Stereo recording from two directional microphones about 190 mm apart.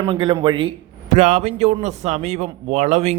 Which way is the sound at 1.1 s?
40° right (ahead or behind).